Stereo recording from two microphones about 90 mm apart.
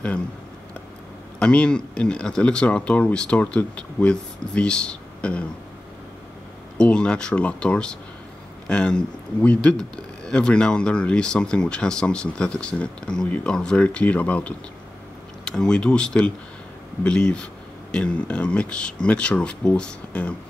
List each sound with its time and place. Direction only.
1.4 s speech: 10° left (ahead or behind)
6.8 s speech: 10° left (ahead or behind)